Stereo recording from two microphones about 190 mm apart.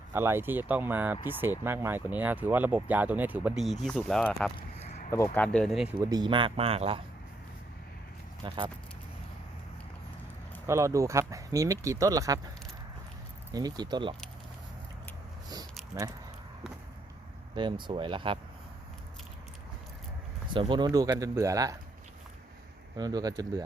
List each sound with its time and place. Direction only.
0.1 s speech: 10° right (ahead or behind)
6.0 s speech: 20° right (ahead or behind)
8.4 s speech: 25° right (ahead or behind)
10.7 s speech: 15° right (ahead or behind)
13.5 s speech: 20° right (ahead or behind)
15.9 s speech: 15° right (ahead or behind)
17.5 s speech: 25° right (ahead or behind)
20.5 s speech: 25° right (ahead or behind)
23.0 s speech: 20° right (ahead or behind)